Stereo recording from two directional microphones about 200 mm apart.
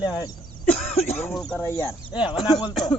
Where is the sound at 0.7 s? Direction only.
30° left (ahead or behind).